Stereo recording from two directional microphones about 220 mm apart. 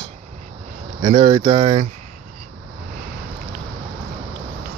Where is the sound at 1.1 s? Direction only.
20° right (ahead or behind).